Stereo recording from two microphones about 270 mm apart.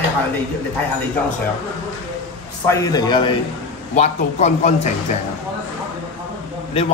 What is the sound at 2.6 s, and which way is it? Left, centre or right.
Speech, centre.